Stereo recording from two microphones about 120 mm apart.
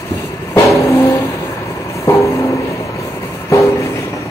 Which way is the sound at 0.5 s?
25° left (ahead or behind).